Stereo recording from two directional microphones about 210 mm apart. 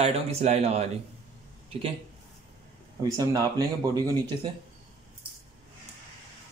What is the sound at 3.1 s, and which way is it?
Speech, 15° right (ahead or behind).